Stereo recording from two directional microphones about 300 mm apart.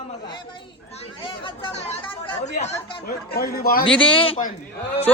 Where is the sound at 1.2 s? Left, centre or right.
Centre.